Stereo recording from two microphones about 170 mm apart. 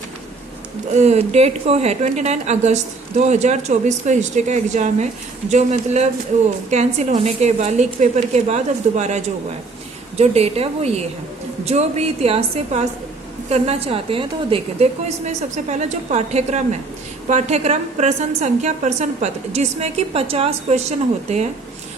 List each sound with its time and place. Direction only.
0.9 s a woman's voice: 40° right (ahead or behind)